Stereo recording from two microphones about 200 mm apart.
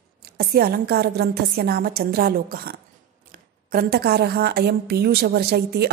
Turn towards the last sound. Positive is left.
turn(degrees=-50)  # may be behind; listen again after turning